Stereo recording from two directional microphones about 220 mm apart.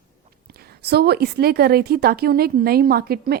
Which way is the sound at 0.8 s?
45° right (ahead or behind).